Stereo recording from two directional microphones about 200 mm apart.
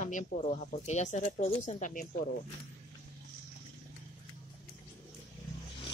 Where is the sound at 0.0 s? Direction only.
40° left (ahead or behind).